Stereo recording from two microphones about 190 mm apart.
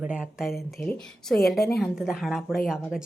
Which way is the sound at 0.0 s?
5° right (ahead or behind).